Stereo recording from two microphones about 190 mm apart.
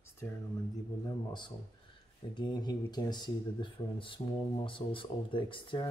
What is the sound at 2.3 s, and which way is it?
Speech, 20° left (ahead or behind).